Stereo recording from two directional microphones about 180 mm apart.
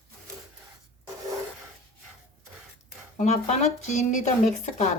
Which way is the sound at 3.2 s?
40° left (ahead or behind).